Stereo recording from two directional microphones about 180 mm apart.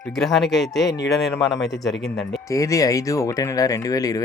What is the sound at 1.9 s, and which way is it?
Speech, 70° left (ahead or behind).